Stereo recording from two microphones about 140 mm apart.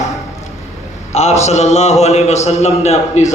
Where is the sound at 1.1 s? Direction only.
50° left (ahead or behind).